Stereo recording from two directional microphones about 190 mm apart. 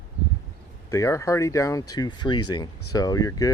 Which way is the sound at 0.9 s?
15° left (ahead or behind).